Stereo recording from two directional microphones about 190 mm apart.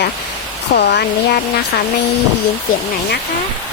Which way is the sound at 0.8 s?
60° left (ahead or behind).